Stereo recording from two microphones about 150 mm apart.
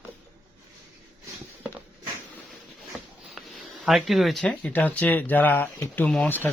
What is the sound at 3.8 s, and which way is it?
Speech, centre (ahead or behind).